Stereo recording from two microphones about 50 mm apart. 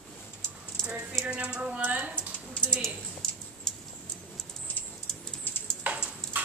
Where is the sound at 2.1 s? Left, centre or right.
Left.